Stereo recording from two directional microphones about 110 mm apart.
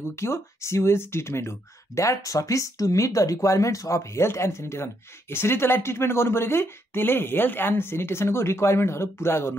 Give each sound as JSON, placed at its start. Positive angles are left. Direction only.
{"t": 0.0, "sound": "speech", "side_deg": 25}